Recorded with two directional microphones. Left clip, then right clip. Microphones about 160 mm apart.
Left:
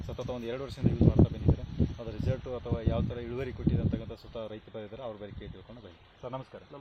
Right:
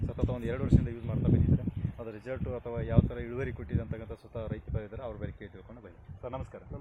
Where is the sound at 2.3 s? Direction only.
20° left (ahead or behind).